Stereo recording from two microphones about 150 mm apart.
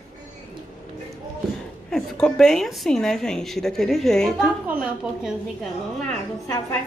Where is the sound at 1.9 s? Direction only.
5° left (ahead or behind).